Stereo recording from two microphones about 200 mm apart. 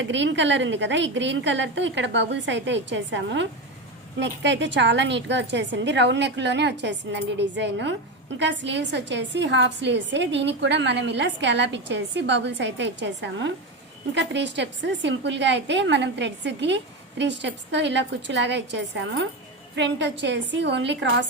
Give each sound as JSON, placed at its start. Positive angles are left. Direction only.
{"t": 0.0, "sound": "a woman's voice", "side_deg": -65}